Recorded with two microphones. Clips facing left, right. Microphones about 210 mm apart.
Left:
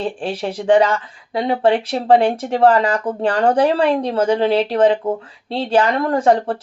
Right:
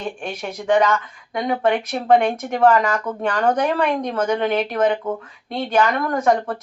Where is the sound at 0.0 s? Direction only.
30° left (ahead or behind).